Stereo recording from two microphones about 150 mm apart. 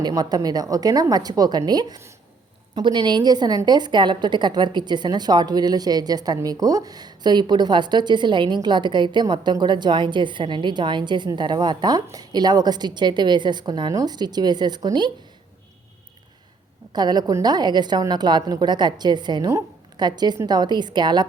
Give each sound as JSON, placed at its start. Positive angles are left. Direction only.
{"t": 0.0, "sound": "a woman's voice", "side_deg": -25}
{"t": 16.9, "sound": "a woman's voice", "side_deg": -30}